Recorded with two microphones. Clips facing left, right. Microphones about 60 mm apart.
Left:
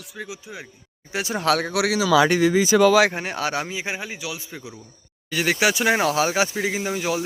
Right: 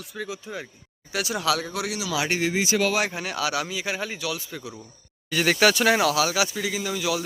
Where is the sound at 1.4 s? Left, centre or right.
Left.